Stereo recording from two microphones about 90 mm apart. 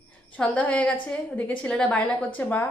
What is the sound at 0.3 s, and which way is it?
A woman's voice, 15° left (ahead or behind).